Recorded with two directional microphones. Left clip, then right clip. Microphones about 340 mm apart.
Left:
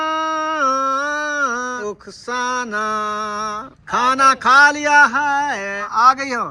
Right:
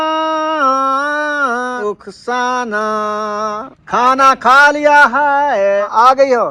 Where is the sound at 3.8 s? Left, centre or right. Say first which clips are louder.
Right 4 dB; centre.